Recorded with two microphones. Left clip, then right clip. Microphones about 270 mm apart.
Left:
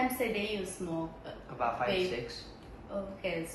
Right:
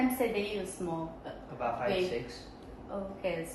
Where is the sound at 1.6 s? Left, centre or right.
Centre.